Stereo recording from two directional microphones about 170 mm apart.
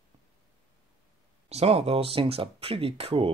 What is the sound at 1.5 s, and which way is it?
Speech, 35° right (ahead or behind).